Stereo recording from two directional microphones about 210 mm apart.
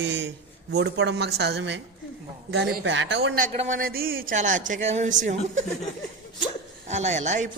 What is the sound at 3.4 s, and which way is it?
A man's voice, 40° right (ahead or behind).